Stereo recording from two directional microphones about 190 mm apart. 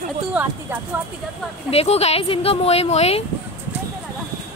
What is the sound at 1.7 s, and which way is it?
Speech, 30° left (ahead or behind).